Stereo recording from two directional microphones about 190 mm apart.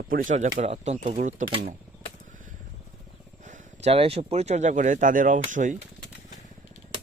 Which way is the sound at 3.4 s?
35° right (ahead or behind).